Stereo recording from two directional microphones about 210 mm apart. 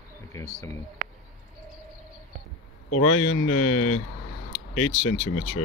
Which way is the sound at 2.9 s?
90° left.